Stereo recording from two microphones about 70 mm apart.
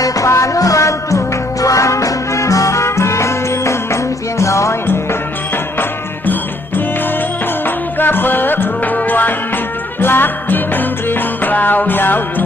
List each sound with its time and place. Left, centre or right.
0.0 s music: left
7.6 s music: left